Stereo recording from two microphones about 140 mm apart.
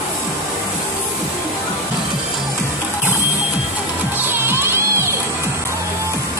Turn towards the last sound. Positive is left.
turn(degrees=-15)  # may be behind; listen again after turning